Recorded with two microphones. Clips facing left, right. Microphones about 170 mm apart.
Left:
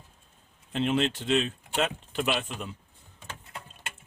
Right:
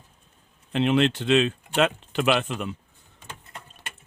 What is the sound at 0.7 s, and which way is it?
Speech, 75° right (ahead or behind).